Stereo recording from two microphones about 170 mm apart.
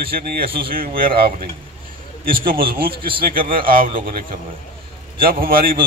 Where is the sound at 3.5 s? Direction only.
60° right (ahead or behind).